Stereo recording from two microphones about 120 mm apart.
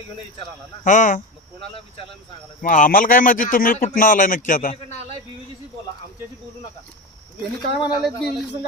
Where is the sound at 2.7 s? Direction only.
90° left.